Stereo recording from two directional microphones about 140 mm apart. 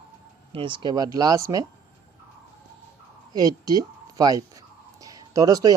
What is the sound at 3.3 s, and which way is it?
Speech, 25° right (ahead or behind).